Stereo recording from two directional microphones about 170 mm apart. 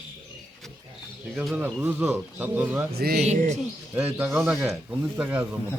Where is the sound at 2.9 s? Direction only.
65° right (ahead or behind).